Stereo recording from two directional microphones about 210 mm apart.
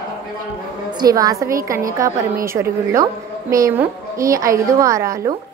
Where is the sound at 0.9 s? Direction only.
15° right (ahead or behind).